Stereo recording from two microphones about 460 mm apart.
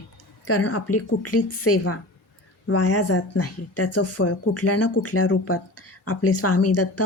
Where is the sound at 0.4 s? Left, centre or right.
Left.